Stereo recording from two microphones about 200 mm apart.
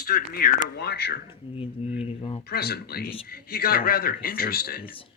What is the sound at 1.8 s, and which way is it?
Speech, 30° left (ahead or behind).